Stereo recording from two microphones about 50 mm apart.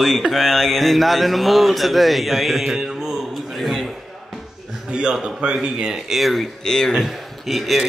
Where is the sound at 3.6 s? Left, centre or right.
Centre.